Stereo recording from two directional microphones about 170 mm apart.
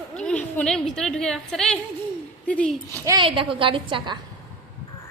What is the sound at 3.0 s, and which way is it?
Speech, 20° right (ahead or behind).